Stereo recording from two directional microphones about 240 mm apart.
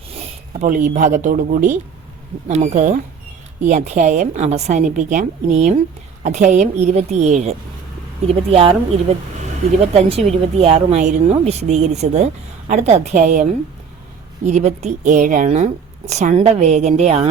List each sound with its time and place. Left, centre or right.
0.1 s speech: right